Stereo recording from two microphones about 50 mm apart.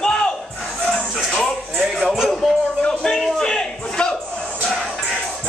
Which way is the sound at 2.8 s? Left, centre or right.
Centre.